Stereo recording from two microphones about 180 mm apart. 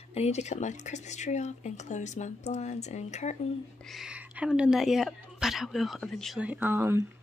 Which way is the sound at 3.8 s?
Centre (ahead or behind).